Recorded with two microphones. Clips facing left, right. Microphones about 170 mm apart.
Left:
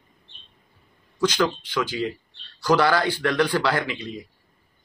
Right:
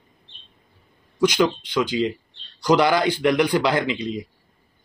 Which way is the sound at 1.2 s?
15° right (ahead or behind).